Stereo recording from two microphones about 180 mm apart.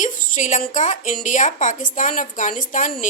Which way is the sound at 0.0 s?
45° left (ahead or behind).